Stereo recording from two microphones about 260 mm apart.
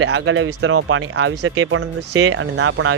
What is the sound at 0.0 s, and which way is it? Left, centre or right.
Speech, right.